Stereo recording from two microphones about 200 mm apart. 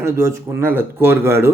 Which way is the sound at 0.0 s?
15° right (ahead or behind).